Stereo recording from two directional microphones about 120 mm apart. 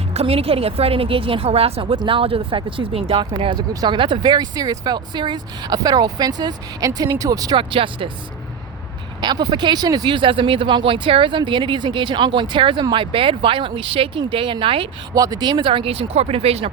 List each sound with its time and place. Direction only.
0.1 s a woman's voice: 55° right (ahead or behind)
3.7 s speech: 35° right (ahead or behind)
7.5 s a woman's voice: 45° right (ahead or behind)
9.2 s a woman's voice: 35° right (ahead or behind)
15.1 s a woman's voice: 30° right (ahead or behind); by 16.7 s 55° right (ahead or behind)